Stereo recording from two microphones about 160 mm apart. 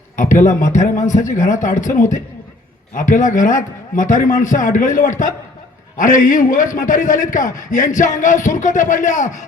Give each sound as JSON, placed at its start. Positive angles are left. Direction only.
{"t": 0.2, "sound": "a man's voice", "side_deg": 55}